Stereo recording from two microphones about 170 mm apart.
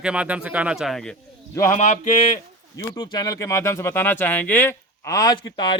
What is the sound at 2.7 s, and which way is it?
Speech, 25° left (ahead or behind).